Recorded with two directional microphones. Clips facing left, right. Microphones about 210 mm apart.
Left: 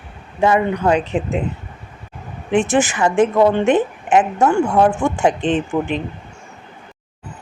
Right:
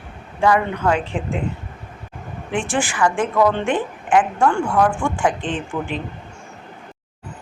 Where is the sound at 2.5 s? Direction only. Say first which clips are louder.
Left 6 dB; 20° left (ahead or behind).